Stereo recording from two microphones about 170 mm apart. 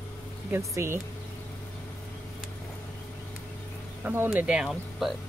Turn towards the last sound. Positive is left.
turn(degrees=0)  # may be behind; listen again after turning